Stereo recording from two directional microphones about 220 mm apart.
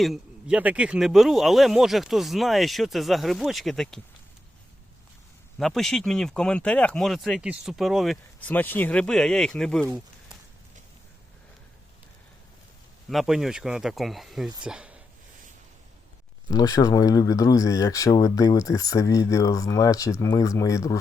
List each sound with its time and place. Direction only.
0.0 s speech: centre (ahead or behind)
5.5 s speech: centre (ahead or behind)
13.1 s speech: centre (ahead or behind)
16.5 s speech: 15° left (ahead or behind)